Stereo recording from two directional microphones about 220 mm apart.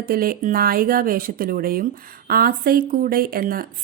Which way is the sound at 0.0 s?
40° right (ahead or behind).